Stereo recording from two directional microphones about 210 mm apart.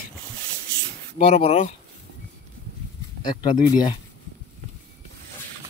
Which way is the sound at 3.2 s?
20° left (ahead or behind).